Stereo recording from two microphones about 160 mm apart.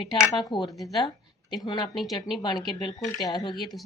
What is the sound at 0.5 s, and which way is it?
Speech, 30° left (ahead or behind).